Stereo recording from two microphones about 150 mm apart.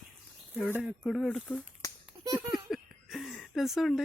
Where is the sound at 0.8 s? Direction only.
5° right (ahead or behind).